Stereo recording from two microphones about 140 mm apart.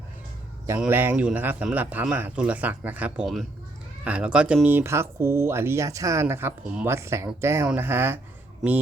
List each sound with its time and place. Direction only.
0.9 s speech: 15° right (ahead or behind)